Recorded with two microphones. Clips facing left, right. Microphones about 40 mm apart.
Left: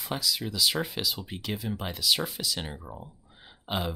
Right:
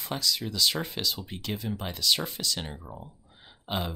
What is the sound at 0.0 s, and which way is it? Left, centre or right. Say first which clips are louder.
Speech: even; centre.